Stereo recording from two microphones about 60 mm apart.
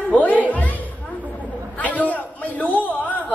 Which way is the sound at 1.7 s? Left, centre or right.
Left.